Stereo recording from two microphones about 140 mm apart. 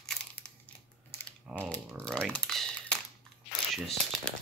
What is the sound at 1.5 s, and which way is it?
Speech, 10° left (ahead or behind).